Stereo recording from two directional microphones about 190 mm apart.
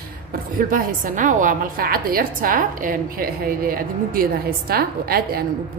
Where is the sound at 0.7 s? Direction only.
45° right (ahead or behind).